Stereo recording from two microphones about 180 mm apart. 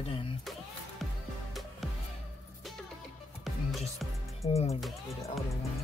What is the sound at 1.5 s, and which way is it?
Music, centre (ahead or behind).